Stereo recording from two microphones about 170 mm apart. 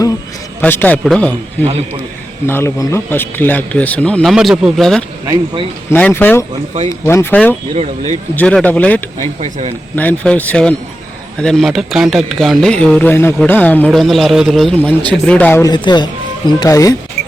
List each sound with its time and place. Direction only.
0.6 s speech: 10° left (ahead or behind)
1.6 s speech: 40° right (ahead or behind)
2.5 s speech: 15° left (ahead or behind)
5.2 s speech: 20° right (ahead or behind)
5.9 s speech: 10° left (ahead or behind)
7.7 s speech: 40° right (ahead or behind)
8.4 s speech: 10° left (ahead or behind)
9.4 s speech: 40° right (ahead or behind)
9.9 s speech: 10° left (ahead or behind)
15.7 s speech: 25° left (ahead or behind)